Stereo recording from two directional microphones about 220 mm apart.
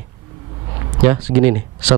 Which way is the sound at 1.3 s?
30° right (ahead or behind).